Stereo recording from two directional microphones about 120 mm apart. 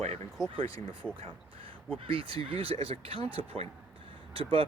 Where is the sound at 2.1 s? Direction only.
50° right (ahead or behind).